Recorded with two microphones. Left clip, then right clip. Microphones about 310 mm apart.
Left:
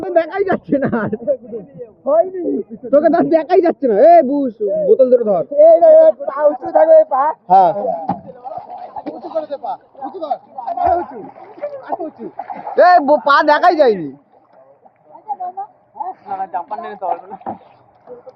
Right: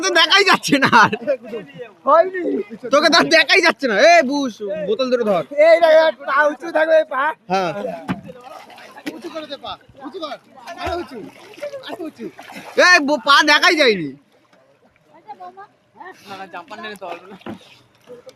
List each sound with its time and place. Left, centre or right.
0.0 s speech: centre
5.9 s speech: right
8.4 s a sound: right
10.2 s speech: right
12.4 s speech: centre
16.3 s speech: right